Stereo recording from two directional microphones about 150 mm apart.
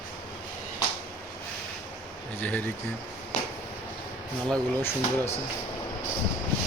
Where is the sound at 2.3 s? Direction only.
10° left (ahead or behind).